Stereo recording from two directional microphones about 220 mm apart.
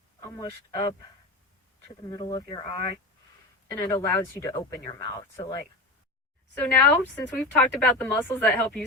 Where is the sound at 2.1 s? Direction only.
20° left (ahead or behind).